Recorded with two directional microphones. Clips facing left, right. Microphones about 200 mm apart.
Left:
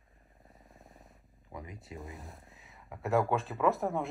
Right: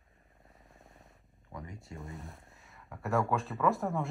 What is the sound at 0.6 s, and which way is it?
Vehicle, centre (ahead or behind).